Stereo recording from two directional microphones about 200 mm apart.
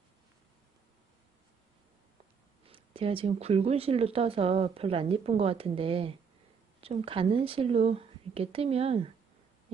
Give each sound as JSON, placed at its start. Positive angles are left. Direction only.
{"t": 2.6, "sound": "speech", "side_deg": -25}